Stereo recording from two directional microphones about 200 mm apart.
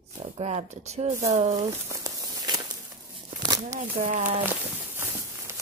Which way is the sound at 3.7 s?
40° right (ahead or behind).